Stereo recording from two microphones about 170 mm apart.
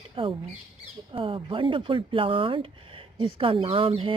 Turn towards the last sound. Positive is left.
turn(degrees=-30)  # may be behind; listen again after turning